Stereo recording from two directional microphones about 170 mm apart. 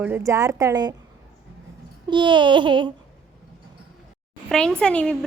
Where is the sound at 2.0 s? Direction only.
25° right (ahead or behind).